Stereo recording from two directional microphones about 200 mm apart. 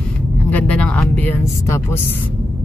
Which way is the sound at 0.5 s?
5° left (ahead or behind).